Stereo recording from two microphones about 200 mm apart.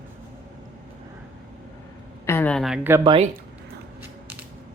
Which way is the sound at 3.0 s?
25° right (ahead or behind).